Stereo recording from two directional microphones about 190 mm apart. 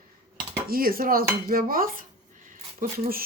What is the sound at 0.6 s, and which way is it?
Speech, 50° right (ahead or behind).